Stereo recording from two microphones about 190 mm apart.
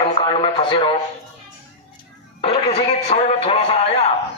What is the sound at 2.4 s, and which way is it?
Speech, 30° left (ahead or behind).